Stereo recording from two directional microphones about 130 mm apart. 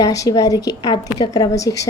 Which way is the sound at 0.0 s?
25° left (ahead or behind).